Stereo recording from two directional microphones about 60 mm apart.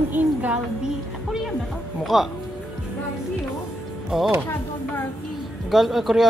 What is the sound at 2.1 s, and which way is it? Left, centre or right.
Speech, centre.